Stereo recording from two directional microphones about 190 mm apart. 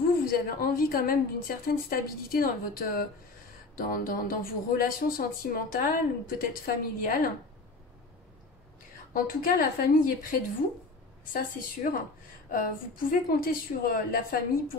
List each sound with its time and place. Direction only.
0.3 s speech: 50° left (ahead or behind)
9.1 s speech: 45° left (ahead or behind)